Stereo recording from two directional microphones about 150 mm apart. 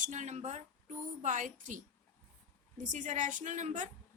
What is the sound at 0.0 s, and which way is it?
A woman's voice, 55° right (ahead or behind).